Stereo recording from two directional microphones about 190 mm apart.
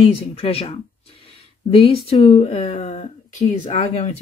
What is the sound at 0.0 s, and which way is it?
Speech, 30° left (ahead or behind).